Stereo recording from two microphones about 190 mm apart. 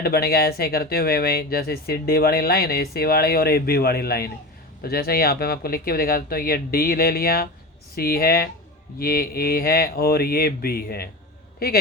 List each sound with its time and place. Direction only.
0.0 s speech: 55° left (ahead or behind)